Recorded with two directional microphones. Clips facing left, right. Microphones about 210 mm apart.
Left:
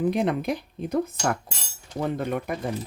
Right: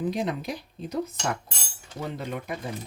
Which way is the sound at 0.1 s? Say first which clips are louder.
Left 5 dB; 55° left (ahead or behind).